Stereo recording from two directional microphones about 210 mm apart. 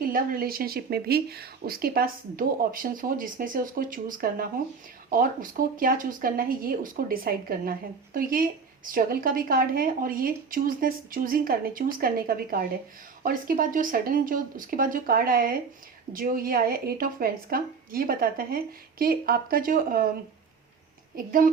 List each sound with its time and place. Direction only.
0.0 s speech: 45° right (ahead or behind)
21.2 s speech: 40° right (ahead or behind)